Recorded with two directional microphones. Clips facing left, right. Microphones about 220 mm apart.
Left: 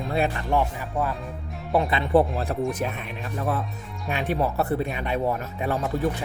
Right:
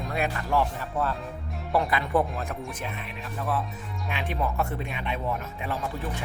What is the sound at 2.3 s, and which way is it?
Speech, 35° left (ahead or behind).